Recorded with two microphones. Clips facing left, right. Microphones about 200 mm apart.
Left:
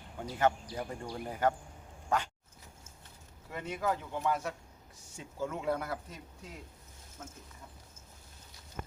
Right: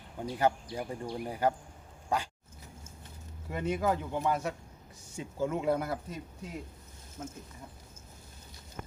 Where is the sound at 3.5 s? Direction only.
20° right (ahead or behind).